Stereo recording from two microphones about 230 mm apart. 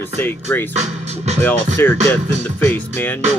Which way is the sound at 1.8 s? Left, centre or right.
Centre.